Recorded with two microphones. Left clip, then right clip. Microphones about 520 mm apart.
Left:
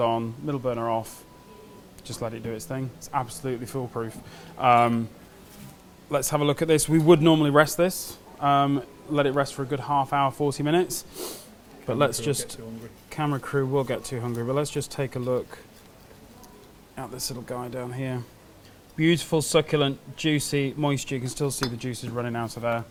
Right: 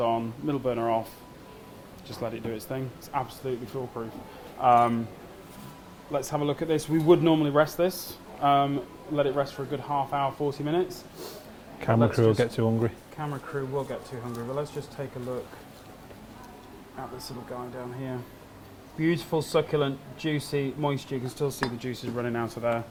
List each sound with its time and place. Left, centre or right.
0.0 s speech: left
2.0 s speech: left
4.6 s speech: left
6.1 s speech: left
11.9 s speech: left
12.6 s speech: right
13.1 s speech: left
17.0 s speech: left